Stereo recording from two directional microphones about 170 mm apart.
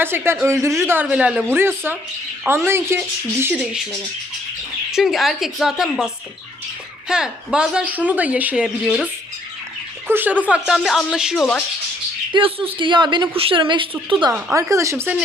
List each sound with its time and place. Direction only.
0.0 s a woman's voice: 15° right (ahead or behind)
4.9 s a woman's voice: centre (ahead or behind)
7.1 s a woman's voice: 5° right (ahead or behind)
10.1 s a woman's voice: 10° right (ahead or behind)
12.3 s a woman's voice: 30° right (ahead or behind)
14.3 s a woman's voice: 15° right (ahead or behind)